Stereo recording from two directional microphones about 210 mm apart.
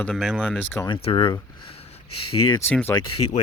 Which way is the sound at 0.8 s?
25° left (ahead or behind).